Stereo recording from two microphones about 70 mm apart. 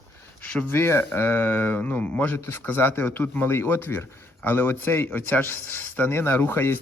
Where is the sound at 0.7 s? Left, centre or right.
Left.